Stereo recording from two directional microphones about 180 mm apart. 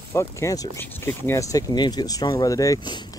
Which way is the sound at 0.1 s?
15° left (ahead or behind).